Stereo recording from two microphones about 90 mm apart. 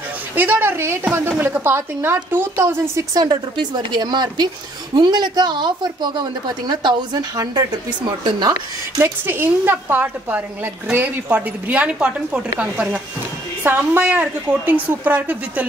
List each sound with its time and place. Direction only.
0.4 s a woman's voice: 20° right (ahead or behind)
3.2 s a woman's voice: 50° right (ahead or behind)
9.0 s a woman's voice: 25° right (ahead or behind)
13.7 s a woman's voice: 20° right (ahead or behind)